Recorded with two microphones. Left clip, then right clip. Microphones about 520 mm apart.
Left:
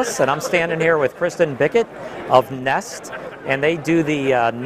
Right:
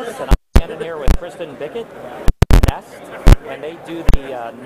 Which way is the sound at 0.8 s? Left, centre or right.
Left.